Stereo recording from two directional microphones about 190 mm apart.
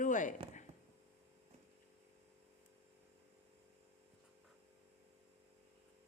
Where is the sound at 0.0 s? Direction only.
40° left (ahead or behind).